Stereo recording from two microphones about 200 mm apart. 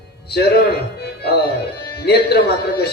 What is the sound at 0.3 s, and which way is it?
Speech, 55° left (ahead or behind).